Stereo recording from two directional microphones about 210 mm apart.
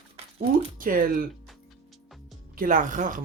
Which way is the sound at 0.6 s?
40° right (ahead or behind).